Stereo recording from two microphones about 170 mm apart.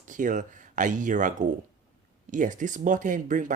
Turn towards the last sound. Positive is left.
turn(degrees=-50)  # may be behind; listen again after turning